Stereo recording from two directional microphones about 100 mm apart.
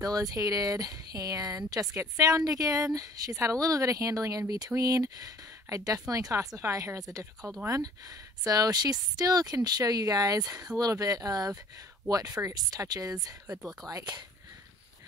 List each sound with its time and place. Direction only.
0.0 s speech: 40° right (ahead or behind)
13.6 s speech: 5° right (ahead or behind)
13.8 s speech: 40° right (ahead or behind)